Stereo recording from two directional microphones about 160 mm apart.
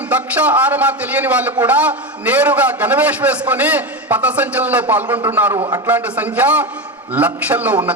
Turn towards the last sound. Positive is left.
turn(degrees=-10)  # may be behind; listen again after turning